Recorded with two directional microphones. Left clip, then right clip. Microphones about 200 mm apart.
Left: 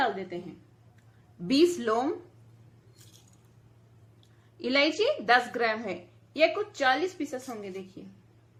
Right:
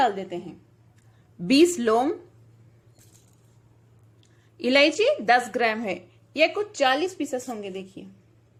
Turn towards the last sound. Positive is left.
turn(degrees=-30)  # may be behind; listen again after turning